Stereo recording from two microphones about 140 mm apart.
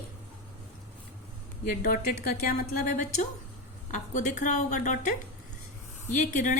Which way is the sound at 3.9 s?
60° left (ahead or behind).